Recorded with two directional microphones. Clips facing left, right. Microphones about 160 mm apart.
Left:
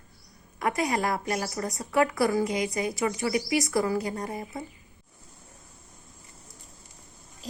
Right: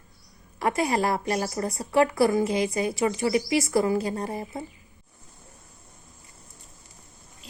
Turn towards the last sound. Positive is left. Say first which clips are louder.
# left 10 dB
turn(degrees=40)  # may be behind; listen again after turning